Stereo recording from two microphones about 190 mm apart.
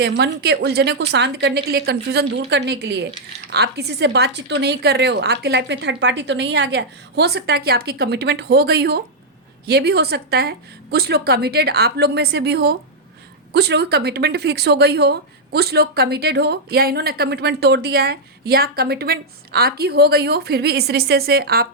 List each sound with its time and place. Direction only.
0.0 s a woman's voice: 65° right (ahead or behind)